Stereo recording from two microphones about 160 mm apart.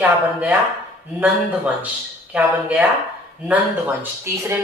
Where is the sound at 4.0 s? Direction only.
15° right (ahead or behind).